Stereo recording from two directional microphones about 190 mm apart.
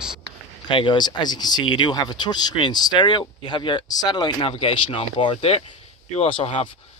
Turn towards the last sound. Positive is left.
turn(degrees=30)  # may be behind; listen again after turning